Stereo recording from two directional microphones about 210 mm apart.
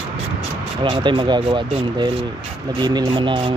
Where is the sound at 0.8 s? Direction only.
25° right (ahead or behind).